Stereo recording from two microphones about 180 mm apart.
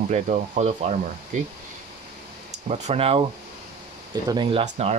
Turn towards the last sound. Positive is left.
turn(degrees=-35)  # may be behind; listen again after turning